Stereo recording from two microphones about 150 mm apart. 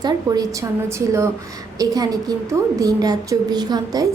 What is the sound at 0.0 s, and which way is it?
A woman's voice, 25° right (ahead or behind).